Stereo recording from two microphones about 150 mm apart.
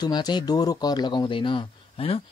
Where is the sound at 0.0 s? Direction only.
30° left (ahead or behind).